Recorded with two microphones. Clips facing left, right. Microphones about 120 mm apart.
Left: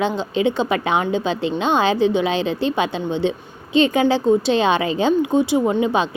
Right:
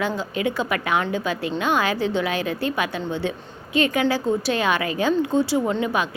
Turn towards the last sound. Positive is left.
turn(degrees=25)  # may be behind; listen again after turning